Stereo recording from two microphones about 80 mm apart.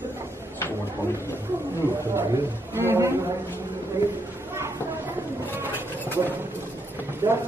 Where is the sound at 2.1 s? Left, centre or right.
Right.